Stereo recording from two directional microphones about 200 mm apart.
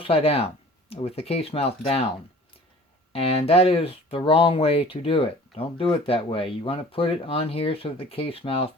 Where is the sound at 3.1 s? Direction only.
30° left (ahead or behind).